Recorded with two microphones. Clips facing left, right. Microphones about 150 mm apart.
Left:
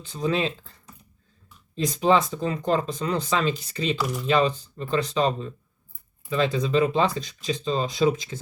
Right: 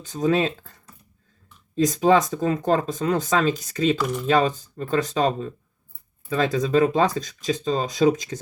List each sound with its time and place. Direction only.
0.0 s speech: 45° right (ahead or behind)
1.7 s speech: 45° right (ahead or behind)